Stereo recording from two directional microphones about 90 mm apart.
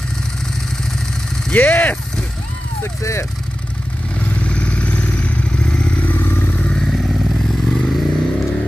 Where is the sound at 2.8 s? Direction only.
35° left (ahead or behind).